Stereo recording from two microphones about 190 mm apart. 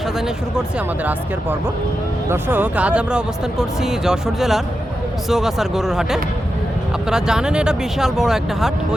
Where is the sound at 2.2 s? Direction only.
10° right (ahead or behind).